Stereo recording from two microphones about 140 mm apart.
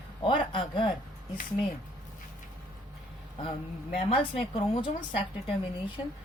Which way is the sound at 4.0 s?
45° left (ahead or behind).